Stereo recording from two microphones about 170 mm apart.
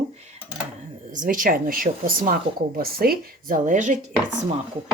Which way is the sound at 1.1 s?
50° right (ahead or behind).